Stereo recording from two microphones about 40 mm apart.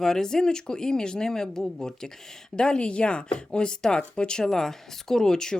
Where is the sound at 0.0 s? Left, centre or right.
Centre.